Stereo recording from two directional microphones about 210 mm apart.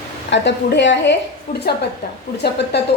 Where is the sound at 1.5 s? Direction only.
40° left (ahead or behind).